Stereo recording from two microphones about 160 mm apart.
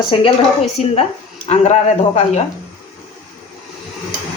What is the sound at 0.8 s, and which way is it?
Speech, 45° left (ahead or behind).